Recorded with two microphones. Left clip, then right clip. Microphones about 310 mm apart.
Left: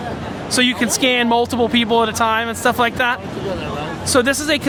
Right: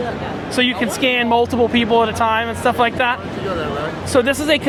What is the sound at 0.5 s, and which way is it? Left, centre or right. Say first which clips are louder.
Speech: left 1 dB; left.